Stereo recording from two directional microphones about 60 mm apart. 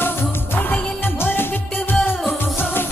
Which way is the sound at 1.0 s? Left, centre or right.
Left.